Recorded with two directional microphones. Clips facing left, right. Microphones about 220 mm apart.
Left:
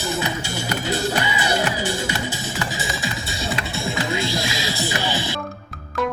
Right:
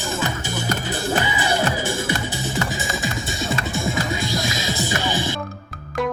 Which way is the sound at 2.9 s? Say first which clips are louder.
Right 2 dB; 45° right (ahead or behind).